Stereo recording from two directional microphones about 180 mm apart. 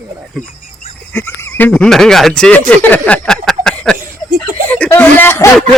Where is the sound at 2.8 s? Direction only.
10° left (ahead or behind).